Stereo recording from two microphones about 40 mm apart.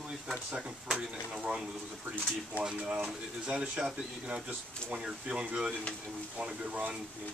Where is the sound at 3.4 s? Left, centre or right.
Right.